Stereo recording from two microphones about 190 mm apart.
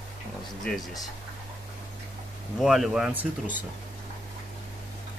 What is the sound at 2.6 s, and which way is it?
Speech, centre (ahead or behind).